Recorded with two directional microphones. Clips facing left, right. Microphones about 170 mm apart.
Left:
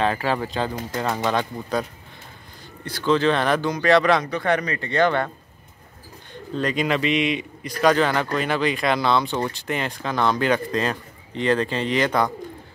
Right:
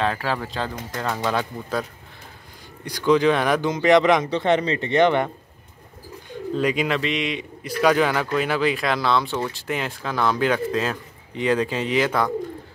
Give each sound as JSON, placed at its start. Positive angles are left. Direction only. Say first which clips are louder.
{"t": 0.0, "sound": "a man's voice", "louder": "left 2 dB", "side_deg": 0}
{"t": 6.5, "sound": "speech", "louder": "right 1 dB", "side_deg": -5}